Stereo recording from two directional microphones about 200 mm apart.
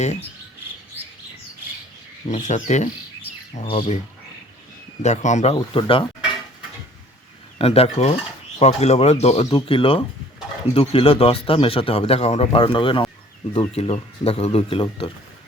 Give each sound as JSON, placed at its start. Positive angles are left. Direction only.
{"t": 2.3, "sound": "speech", "side_deg": 35}
{"t": 5.0, "sound": "speech", "side_deg": 35}
{"t": 7.6, "sound": "speech", "side_deg": 30}